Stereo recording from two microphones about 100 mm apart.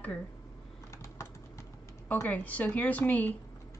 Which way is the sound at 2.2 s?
15° left (ahead or behind).